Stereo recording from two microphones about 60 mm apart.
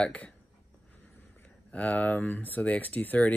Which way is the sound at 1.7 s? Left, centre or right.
Left.